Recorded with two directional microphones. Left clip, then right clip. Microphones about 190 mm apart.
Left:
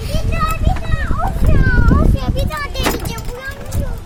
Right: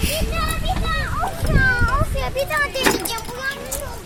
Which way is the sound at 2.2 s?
50° left (ahead or behind).